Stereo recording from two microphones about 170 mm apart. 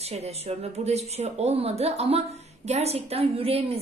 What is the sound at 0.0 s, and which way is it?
A woman's voice, 40° right (ahead or behind).